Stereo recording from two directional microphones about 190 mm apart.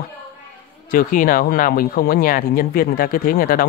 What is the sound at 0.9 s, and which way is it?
Speech, 45° left (ahead or behind).